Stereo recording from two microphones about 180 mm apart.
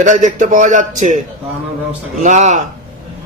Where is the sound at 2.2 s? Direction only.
40° right (ahead or behind).